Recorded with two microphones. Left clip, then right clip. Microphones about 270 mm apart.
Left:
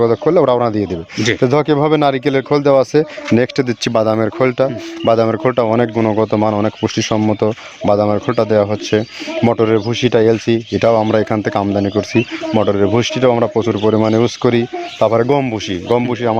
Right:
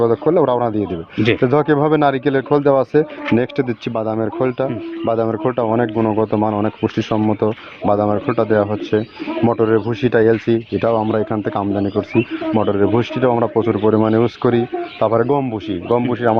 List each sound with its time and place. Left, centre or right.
0.0 s speech: left